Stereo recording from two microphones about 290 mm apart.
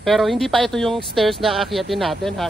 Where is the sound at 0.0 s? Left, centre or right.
Centre.